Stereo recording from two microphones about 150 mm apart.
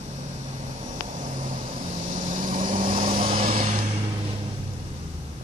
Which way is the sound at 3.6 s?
50° right (ahead or behind).